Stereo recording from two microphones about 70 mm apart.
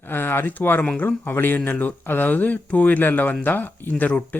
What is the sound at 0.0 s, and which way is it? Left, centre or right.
Speech, left.